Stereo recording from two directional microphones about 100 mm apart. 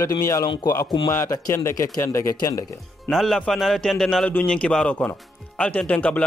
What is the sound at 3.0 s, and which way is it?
Speech, 5° left (ahead or behind).